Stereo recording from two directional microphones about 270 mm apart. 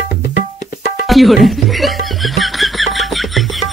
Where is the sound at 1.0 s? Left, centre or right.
Centre.